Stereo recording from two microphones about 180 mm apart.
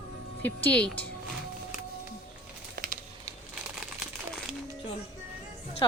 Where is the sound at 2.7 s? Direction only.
50° right (ahead or behind).